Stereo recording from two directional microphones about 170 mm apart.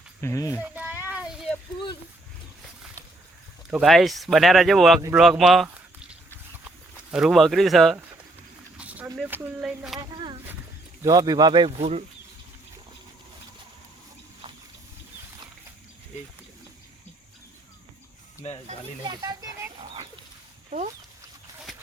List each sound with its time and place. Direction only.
0.2 s speech: 15° left (ahead or behind)
0.6 s a sound: 10° right (ahead or behind)
3.7 s speech: centre (ahead or behind)
5.1 s walk: 5° right (ahead or behind)
9.1 s speech: 10° right (ahead or behind)
10.0 s speech: 25° right (ahead or behind)
18.4 s speech: 40° left (ahead or behind)
19.0 s speech: 20° right (ahead or behind)
20.7 s speech: 45° right (ahead or behind)